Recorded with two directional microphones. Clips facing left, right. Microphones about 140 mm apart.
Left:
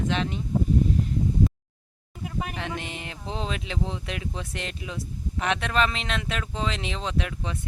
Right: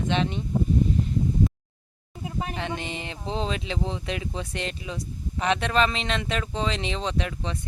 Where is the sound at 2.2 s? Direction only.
30° right (ahead or behind).